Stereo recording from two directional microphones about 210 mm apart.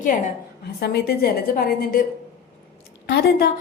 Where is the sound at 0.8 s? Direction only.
50° left (ahead or behind).